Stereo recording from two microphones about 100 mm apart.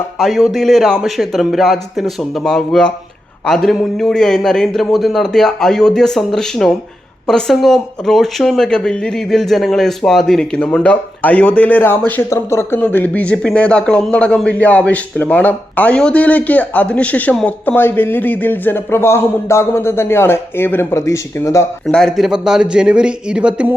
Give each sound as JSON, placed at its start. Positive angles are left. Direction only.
{"t": 0.2, "sound": "speech", "side_deg": 0}
{"t": 21.8, "sound": "a man's voice", "side_deg": 5}